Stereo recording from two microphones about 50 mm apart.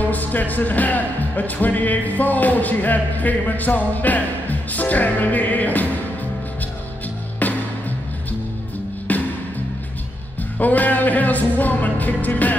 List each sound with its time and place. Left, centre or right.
0.0 s speech: left
9.1 s music: left
10.6 s speech: left